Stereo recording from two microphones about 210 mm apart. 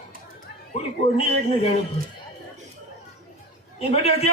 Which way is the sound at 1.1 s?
30° left (ahead or behind).